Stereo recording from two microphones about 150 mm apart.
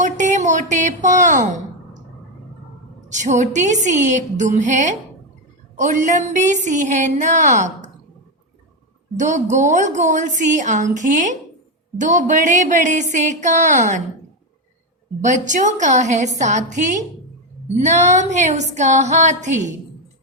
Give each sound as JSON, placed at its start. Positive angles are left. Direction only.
{"t": 0.0, "sound": "speech", "side_deg": -55}
{"t": 3.1, "sound": "a woman's voice", "side_deg": -55}
{"t": 9.1, "sound": "a woman's voice", "side_deg": -55}
{"t": 15.2, "sound": "a woman's voice", "side_deg": -55}